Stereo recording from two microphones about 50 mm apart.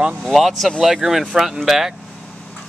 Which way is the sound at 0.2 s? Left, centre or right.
Centre.